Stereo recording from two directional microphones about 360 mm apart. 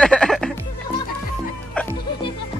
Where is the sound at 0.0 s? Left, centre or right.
Centre.